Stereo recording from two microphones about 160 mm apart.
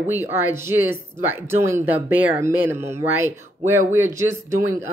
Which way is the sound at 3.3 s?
45° right (ahead or behind).